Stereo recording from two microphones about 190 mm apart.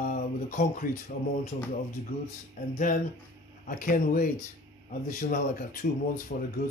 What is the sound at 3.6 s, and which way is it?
Speech, 45° left (ahead or behind).